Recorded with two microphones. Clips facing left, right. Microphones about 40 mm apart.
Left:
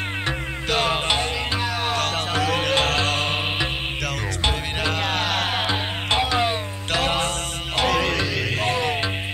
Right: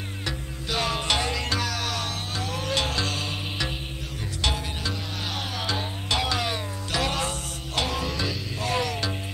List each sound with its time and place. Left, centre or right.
0.7 s music: left
1.5 s music: left
2.0 s music: left
2.7 s music: left
4.8 s music: left
5.7 s music: left
6.9 s music: left
7.8 s music: left
8.7 s music: left